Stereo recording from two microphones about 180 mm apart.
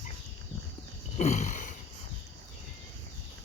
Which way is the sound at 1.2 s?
40° left (ahead or behind).